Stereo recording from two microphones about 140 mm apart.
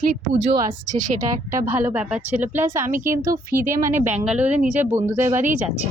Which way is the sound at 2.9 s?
75° right (ahead or behind).